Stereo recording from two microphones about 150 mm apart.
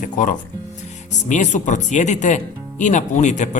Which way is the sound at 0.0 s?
60° left (ahead or behind).